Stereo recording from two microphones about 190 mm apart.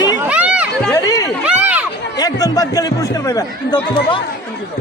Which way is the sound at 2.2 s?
20° left (ahead or behind).